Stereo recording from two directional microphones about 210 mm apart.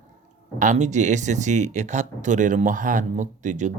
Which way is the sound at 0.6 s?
35° right (ahead or behind).